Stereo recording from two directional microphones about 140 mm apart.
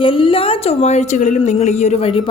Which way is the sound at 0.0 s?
40° left (ahead or behind).